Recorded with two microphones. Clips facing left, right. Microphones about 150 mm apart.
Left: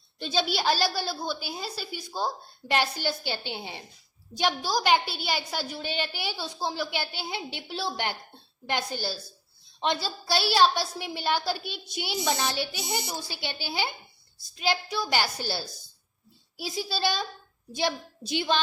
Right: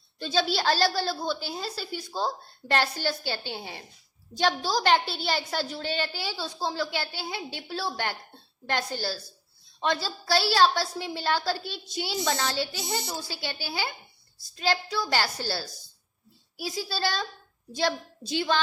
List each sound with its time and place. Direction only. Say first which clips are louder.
0.2 s a woman's voice: right 1 dB; 15° left (ahead or behind)